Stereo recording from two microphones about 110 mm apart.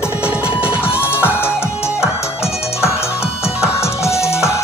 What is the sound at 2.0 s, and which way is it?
Music, 25° left (ahead or behind).